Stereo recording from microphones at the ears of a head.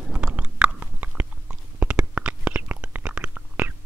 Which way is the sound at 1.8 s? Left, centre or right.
Right.